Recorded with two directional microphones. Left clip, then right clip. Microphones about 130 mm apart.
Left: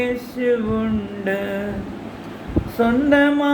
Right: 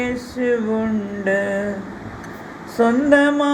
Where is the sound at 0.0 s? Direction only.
35° right (ahead or behind).